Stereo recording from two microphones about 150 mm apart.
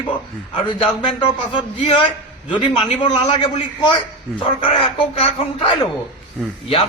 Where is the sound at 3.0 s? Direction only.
30° left (ahead or behind).